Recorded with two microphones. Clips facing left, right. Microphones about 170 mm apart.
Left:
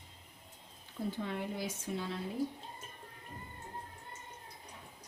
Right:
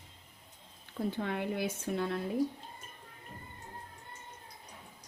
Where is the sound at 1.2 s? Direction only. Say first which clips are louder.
Right 4 dB; 65° right (ahead or behind).